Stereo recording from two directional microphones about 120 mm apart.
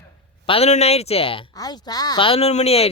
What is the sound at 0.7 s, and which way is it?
Speech, 60° left (ahead or behind).